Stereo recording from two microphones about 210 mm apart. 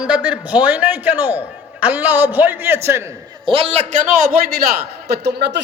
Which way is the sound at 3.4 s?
25° right (ahead or behind).